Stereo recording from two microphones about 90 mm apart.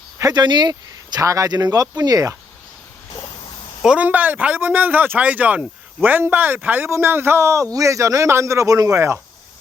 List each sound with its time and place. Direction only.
0.2 s speech: 45° right (ahead or behind)
3.8 s a man's voice: 15° right (ahead or behind)